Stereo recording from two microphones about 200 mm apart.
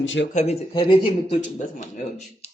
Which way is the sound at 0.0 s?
70° left (ahead or behind).